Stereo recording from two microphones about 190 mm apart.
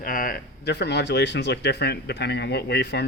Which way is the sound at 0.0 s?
45° left (ahead or behind).